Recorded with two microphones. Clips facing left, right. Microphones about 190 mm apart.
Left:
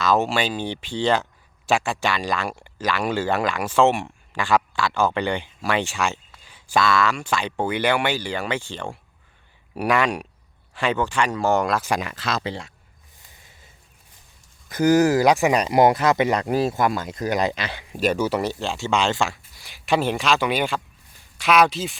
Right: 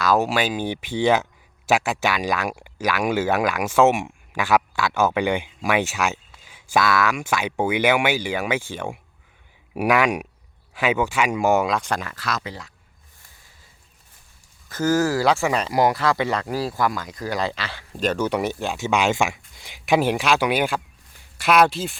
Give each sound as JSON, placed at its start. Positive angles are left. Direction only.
{"t": 0.0, "sound": "speech", "side_deg": -5}
{"t": 11.9, "sound": "speech", "side_deg": 15}
{"t": 14.7, "sound": "speech", "side_deg": 15}
{"t": 18.6, "sound": "a man's voice", "side_deg": -15}